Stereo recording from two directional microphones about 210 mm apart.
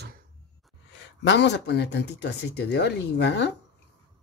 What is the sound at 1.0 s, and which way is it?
Speech, 55° left (ahead or behind).